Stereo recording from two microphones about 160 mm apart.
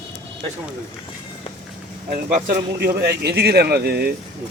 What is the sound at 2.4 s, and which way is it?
Speech, 60° right (ahead or behind).